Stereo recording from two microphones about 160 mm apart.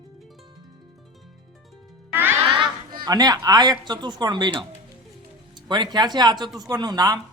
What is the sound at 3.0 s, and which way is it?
Speech, 25° right (ahead or behind).